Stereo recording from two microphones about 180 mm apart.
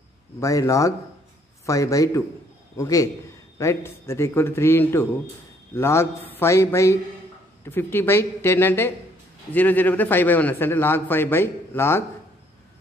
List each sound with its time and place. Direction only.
0.4 s a man's voice: 15° left (ahead or behind)